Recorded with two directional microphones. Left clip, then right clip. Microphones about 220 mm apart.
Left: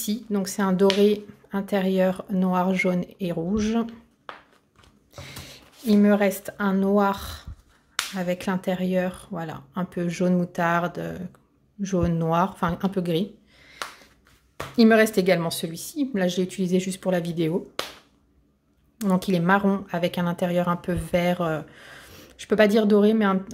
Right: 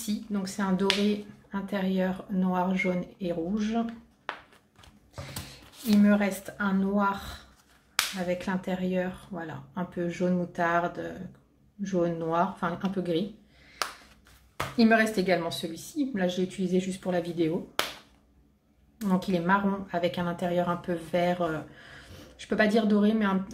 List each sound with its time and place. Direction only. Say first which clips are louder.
0.0 s speech: left 6 dB; 45° left (ahead or behind)
5.1 s a sound: left 2 dB; 45° left (ahead or behind)
6.0 s speech: left 6 dB; 45° left (ahead or behind)
14.8 s speech: left 6 dB; 45° left (ahead or behind)
18.9 s speech: left 5 dB; 45° left (ahead or behind)